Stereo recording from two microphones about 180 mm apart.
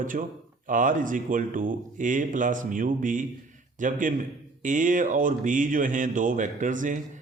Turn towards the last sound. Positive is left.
turn(degrees=-45)  # may be behind; listen again after turning